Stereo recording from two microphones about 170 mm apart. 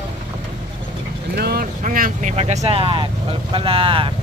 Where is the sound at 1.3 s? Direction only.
65° right (ahead or behind).